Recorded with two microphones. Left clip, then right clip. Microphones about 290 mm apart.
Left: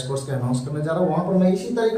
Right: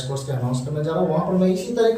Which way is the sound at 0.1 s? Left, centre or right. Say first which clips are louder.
Left 2 dB; centre.